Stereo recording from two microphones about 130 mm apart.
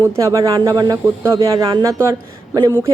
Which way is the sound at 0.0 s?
25° right (ahead or behind).